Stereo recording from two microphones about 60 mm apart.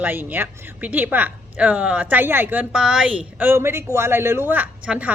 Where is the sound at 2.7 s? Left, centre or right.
Centre.